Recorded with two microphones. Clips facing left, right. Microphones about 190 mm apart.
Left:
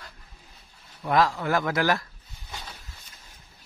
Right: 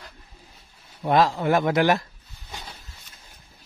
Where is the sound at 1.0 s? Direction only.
25° right (ahead or behind).